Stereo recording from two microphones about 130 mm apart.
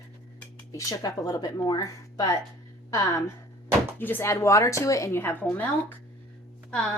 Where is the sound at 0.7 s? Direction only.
25° left (ahead or behind).